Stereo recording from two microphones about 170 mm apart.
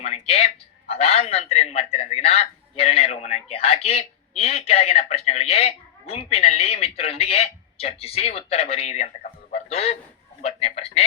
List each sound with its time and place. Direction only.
0.0 s a man's voice: 35° left (ahead or behind)